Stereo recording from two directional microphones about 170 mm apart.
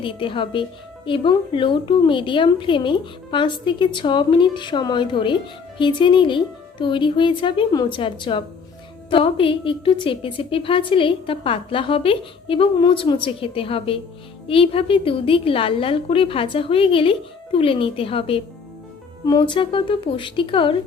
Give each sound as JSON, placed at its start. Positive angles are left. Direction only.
{"t": 0.0, "sound": "a woman's voice", "side_deg": 30}